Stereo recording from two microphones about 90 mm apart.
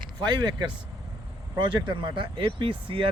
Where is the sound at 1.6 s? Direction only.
60° right (ahead or behind); by 3.1 s 75° right (ahead or behind).